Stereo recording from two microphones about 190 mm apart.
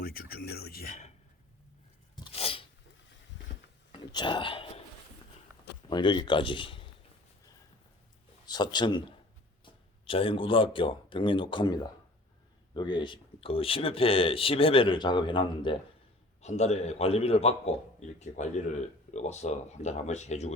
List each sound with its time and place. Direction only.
0.0 s speech: 50° left (ahead or behind)
2.1 s sneeze: 30° left (ahead or behind)
3.9 s speech: 25° left (ahead or behind)
5.9 s speech: 25° left (ahead or behind)
8.4 s speech: 20° left (ahead or behind)
10.1 s speech: 30° left (ahead or behind)
16.4 s speech: 35° left (ahead or behind)
19.1 s speech: 35° left (ahead or behind)